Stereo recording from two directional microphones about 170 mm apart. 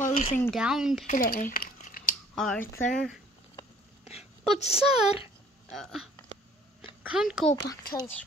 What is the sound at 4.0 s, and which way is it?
Wail, 35° left (ahead or behind).